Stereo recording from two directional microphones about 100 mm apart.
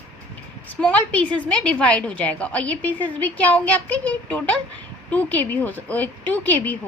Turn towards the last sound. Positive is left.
turn(degrees=15)  # may be behind; listen again after turning